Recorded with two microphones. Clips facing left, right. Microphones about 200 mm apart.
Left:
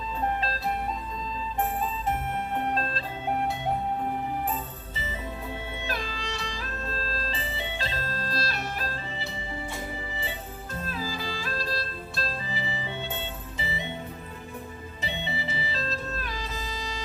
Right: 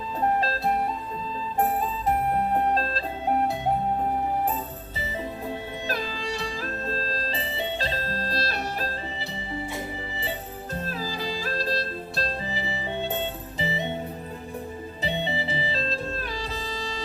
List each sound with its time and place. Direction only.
0.3 s music: 40° right (ahead or behind)
5.2 s music: 35° right (ahead or behind)
10.8 s music: 35° right (ahead or behind)
15.0 s music: 35° right (ahead or behind)